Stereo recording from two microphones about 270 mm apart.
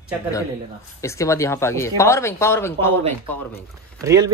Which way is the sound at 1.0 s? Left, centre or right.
Centre.